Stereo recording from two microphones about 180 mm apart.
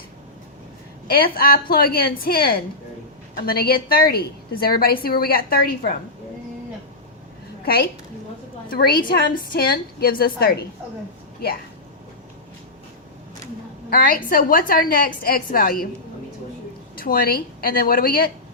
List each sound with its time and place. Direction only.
1.0 s a woman's voice: 55° left (ahead or behind)
7.6 s a woman's voice: 60° left (ahead or behind)
13.9 s a woman's voice: 55° left (ahead or behind)
16.9 s a woman's voice: 55° left (ahead or behind)